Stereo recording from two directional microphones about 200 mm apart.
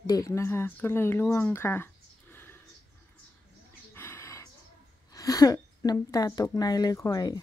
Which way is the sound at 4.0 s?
15° left (ahead or behind).